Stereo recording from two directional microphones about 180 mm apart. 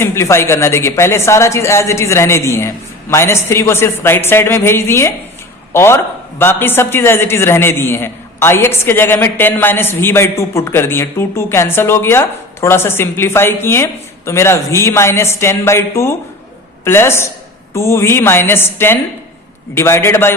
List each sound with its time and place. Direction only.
0.0 s a man's voice: 15° left (ahead or behind)